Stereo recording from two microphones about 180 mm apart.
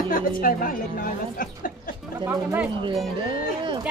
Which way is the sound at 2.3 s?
5° right (ahead or behind).